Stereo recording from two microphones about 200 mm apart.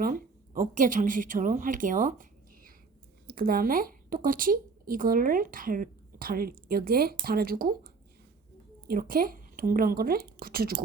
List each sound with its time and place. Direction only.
0.0 s a woman's voice: 45° right (ahead or behind)
3.2 s a woman's voice: 50° right (ahead or behind)
8.9 s speech: 45° right (ahead or behind)